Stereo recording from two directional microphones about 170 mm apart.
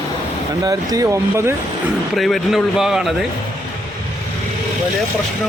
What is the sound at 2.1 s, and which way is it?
Speech, centre (ahead or behind).